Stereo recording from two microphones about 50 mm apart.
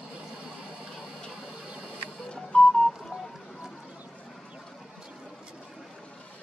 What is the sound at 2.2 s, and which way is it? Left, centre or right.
Music, centre.